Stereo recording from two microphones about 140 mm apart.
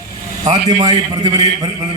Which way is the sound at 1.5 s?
40° right (ahead or behind).